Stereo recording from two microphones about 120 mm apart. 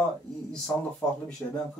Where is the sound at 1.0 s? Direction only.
20° left (ahead or behind).